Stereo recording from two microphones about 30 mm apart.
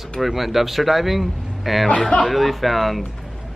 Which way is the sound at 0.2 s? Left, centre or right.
Centre.